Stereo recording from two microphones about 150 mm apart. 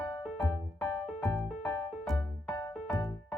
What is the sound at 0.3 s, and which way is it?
Music, centre (ahead or behind).